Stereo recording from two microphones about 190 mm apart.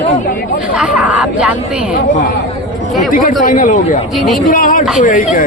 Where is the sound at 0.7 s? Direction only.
5° right (ahead or behind).